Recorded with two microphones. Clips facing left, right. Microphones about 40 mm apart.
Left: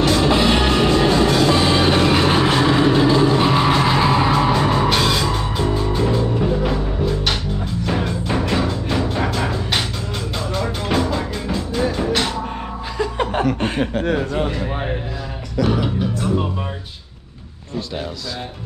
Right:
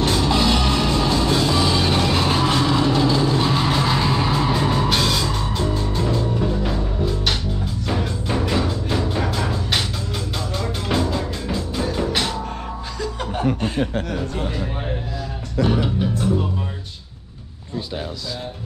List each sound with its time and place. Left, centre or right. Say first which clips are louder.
0.0 s music: left 3 dB; left; by 9.3 s centre
10.6 s music: left 2 dB; centre
13.0 s chuckle: left 7 dB; left
13.9 s a sound: left 5 dB; left